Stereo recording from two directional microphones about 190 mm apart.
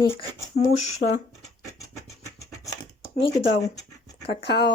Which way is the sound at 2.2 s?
15° left (ahead or behind).